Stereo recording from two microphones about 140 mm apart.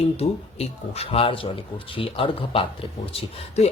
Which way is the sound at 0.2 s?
45° left (ahead or behind).